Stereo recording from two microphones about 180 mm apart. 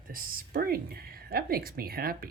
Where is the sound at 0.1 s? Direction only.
55° right (ahead or behind).